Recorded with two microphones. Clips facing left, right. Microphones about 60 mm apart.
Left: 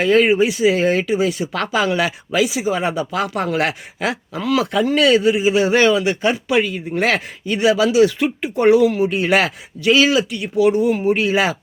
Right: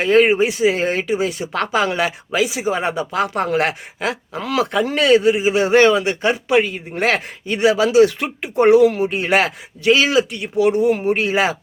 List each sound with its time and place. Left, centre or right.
0.0 s speech: right
9.0 s speech: right